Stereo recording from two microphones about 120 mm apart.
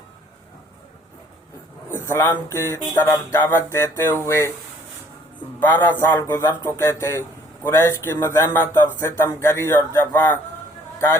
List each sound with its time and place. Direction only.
1.9 s a sound: 20° left (ahead or behind)
2.5 s a man's voice: 20° left (ahead or behind)
5.5 s a man's voice: 15° left (ahead or behind)